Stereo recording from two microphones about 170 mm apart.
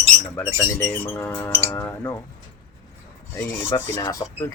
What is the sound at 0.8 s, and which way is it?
Speech, 10° left (ahead or behind).